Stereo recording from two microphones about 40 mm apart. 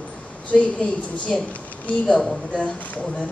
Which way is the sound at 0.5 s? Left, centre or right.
Left.